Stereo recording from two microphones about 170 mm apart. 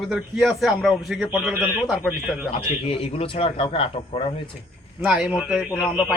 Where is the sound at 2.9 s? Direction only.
30° left (ahead or behind).